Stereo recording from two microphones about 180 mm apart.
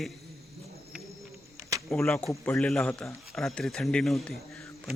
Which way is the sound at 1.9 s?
5° left (ahead or behind).